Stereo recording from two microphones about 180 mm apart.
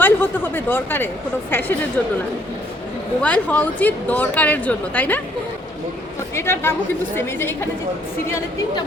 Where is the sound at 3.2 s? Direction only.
10° left (ahead or behind).